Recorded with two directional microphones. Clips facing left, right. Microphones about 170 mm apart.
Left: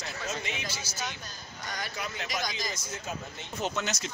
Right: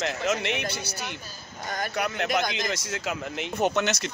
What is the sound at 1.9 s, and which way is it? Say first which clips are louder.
Speech: right 12 dB; 65° right (ahead or behind).